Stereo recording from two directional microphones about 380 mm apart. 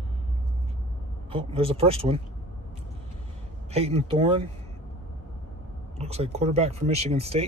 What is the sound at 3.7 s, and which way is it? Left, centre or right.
Speech, centre.